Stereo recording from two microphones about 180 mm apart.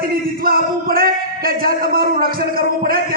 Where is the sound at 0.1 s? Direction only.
55° right (ahead or behind).